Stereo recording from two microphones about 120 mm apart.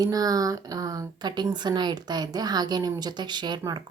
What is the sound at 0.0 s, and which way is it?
A woman's voice, 30° right (ahead or behind).